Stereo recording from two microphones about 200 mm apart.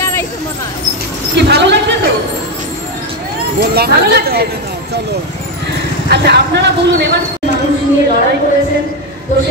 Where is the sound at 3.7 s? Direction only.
50° right (ahead or behind).